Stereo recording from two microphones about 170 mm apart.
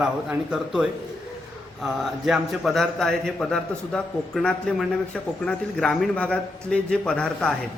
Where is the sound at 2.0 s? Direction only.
Centre (ahead or behind).